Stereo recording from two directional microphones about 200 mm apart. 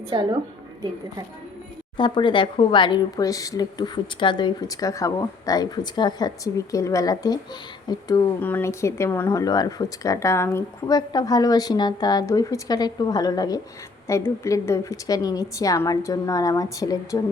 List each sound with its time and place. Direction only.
0.1 s a woman's voice: 20° right (ahead or behind)
2.0 s a woman's voice: 25° left (ahead or behind)